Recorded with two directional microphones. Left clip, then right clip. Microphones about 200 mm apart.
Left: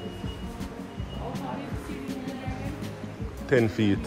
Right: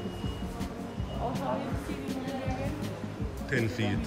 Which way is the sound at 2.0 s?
Centre (ahead or behind).